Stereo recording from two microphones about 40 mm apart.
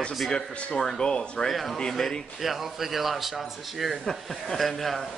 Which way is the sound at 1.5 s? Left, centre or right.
Centre.